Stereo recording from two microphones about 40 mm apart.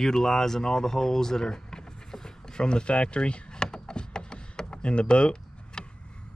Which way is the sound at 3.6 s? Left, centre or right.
Centre.